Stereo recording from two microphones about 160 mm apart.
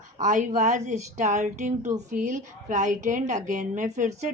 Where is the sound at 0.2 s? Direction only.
50° right (ahead or behind).